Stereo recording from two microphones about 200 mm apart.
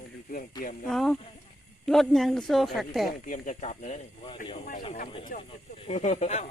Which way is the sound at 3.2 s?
40° left (ahead or behind).